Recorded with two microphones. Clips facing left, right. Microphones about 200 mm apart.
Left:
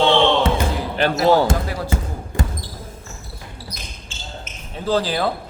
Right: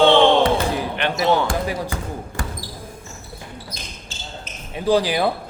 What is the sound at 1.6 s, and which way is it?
Speech, 15° right (ahead or behind).